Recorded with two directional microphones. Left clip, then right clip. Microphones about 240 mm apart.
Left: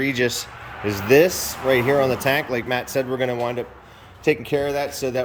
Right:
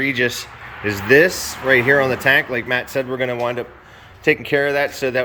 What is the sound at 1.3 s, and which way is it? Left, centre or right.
Speech, left.